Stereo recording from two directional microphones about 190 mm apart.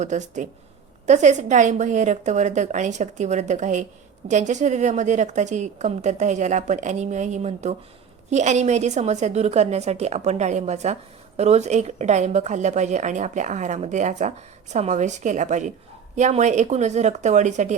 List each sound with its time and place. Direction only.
0.0 s a woman's voice: 40° right (ahead or behind)